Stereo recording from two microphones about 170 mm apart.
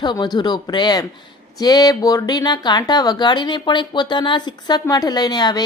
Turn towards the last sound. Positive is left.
turn(degrees=25)  # may be behind; listen again after turning